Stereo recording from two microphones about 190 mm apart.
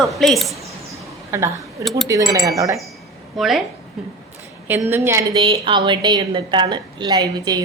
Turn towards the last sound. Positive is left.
turn(degrees=-20)  # may be behind; listen again after turning